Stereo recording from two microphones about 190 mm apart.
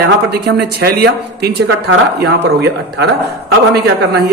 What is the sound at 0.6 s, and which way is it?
A man's voice, 55° right (ahead or behind).